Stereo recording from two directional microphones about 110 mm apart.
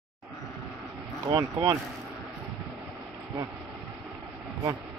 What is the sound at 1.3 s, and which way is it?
Speech, 35° right (ahead or behind).